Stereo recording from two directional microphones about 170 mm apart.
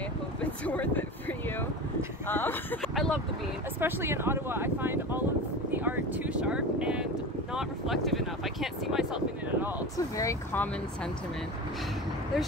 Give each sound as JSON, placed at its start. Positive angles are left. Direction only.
{"t": 0.4, "sound": "a sound", "side_deg": 10}
{"t": 2.2, "sound": "speech", "side_deg": 10}
{"t": 2.8, "sound": "a sound", "side_deg": 0}
{"t": 3.8, "sound": "speech", "side_deg": -15}
{"t": 5.7, "sound": "vehicle", "side_deg": -10}
{"t": 7.5, "sound": "speech", "side_deg": 0}
{"t": 9.9, "sound": "speech", "side_deg": 20}